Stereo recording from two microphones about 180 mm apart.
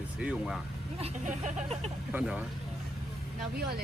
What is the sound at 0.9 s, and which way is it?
Speech, 40° right (ahead or behind).